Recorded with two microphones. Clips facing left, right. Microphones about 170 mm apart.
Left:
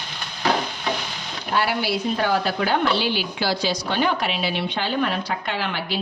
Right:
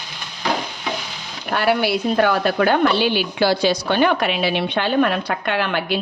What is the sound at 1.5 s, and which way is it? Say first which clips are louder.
Speech: right 4 dB; 60° right (ahead or behind).